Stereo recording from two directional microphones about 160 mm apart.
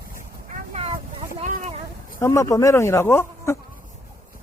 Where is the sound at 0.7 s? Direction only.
40° right (ahead or behind).